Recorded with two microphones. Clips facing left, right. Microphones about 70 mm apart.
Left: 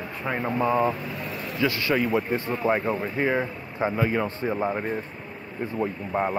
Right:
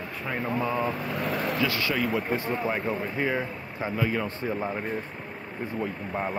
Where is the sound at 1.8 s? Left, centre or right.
Centre.